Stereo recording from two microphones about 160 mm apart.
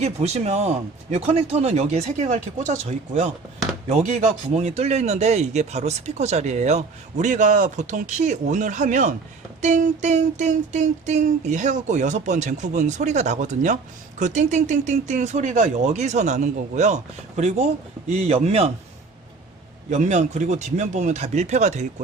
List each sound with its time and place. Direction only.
0.0 s a man's voice: 45° right (ahead or behind)
19.9 s a man's voice: 50° right (ahead or behind)